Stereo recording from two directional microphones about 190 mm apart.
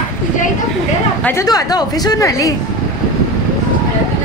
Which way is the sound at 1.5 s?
20° left (ahead or behind).